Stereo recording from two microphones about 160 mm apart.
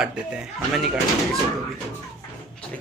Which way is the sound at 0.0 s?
5° right (ahead or behind).